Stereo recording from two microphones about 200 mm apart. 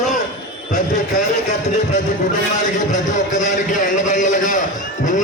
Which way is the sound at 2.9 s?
35° left (ahead or behind).